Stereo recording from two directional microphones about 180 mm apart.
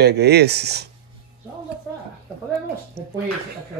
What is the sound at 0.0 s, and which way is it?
Speech, 65° right (ahead or behind).